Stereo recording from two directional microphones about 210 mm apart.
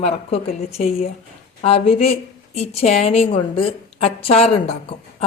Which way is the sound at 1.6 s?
30° left (ahead or behind).